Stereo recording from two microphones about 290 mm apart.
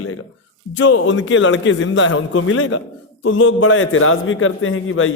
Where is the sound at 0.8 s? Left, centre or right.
Left.